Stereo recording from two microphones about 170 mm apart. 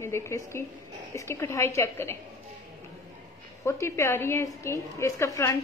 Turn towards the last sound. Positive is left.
turn(degrees=15)  # may be behind; listen again after turning